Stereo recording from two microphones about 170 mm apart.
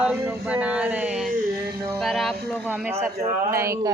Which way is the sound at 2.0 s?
Centre (ahead or behind).